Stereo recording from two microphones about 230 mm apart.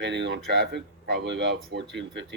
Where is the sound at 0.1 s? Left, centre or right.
Right.